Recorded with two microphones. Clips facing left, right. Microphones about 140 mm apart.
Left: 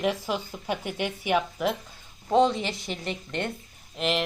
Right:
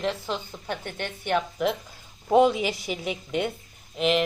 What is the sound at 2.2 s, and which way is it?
A woman's voice, 10° right (ahead or behind).